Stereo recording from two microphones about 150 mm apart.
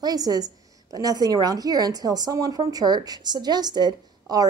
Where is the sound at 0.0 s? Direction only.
25° right (ahead or behind).